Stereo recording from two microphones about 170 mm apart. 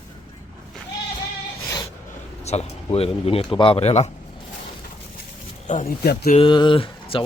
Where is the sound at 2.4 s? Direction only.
40° left (ahead or behind).